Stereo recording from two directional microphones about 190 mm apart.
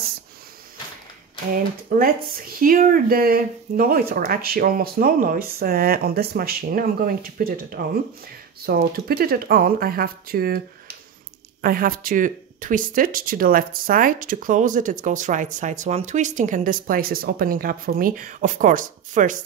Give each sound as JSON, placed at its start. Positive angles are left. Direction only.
{"t": 1.5, "sound": "speech", "side_deg": -50}
{"t": 11.6, "sound": "speech", "side_deg": -50}